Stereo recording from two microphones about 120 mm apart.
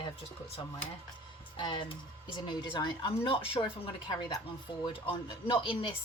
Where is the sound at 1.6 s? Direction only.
40° left (ahead or behind).